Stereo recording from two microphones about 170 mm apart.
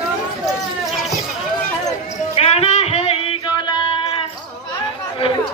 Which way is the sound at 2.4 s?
35° left (ahead or behind).